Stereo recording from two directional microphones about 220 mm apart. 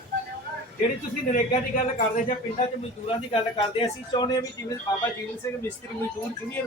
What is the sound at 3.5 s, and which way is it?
Speech, 20° left (ahead or behind).